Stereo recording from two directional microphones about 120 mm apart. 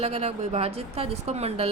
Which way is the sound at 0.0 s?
60° right (ahead or behind).